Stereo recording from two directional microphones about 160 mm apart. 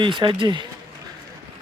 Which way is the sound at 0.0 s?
30° right (ahead or behind).